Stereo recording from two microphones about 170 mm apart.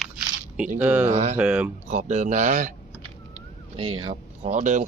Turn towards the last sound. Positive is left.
turn(degrees=-45)  # may be behind; listen again after turning